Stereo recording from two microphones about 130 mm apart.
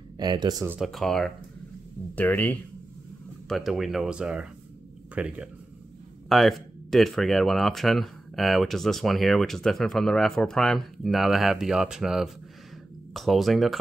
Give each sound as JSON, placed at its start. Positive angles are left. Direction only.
{"t": 0.2, "sound": "speech", "side_deg": -35}
{"t": 0.7, "sound": "speech", "side_deg": 0}
{"t": 2.1, "sound": "speech", "side_deg": 15}
{"t": 3.4, "sound": "speech", "side_deg": 0}
{"t": 6.2, "sound": "speech", "side_deg": 0}